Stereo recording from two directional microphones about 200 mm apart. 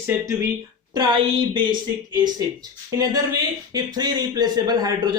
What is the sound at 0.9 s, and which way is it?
A man's voice, 25° right (ahead or behind).